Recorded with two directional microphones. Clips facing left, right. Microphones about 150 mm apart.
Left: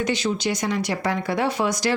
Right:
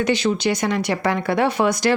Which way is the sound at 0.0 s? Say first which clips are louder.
Right 4 dB; 65° right (ahead or behind).